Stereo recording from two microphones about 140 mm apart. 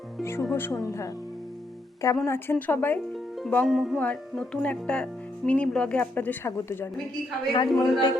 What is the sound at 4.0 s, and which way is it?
A woman's voice, 10° left (ahead or behind).